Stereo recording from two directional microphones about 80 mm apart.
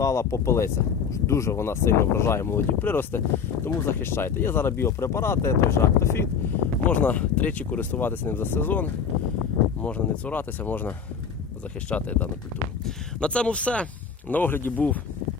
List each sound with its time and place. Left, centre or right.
0.0 s speech: left
6.9 s speech: centre